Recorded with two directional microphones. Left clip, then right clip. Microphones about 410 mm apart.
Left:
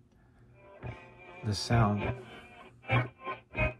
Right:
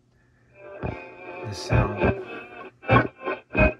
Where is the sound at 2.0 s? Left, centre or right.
Right.